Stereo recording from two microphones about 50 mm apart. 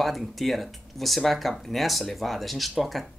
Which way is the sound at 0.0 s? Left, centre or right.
Centre.